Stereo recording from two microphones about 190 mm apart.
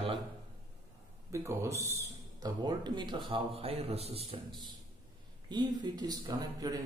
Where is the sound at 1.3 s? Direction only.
15° right (ahead or behind).